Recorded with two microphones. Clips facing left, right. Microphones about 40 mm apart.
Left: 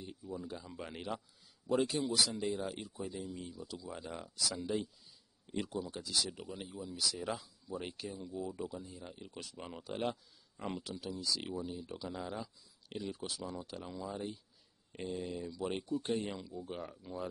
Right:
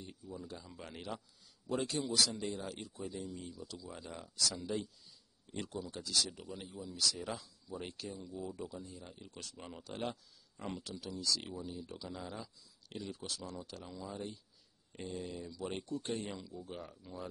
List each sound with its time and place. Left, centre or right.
0.2 s speech: centre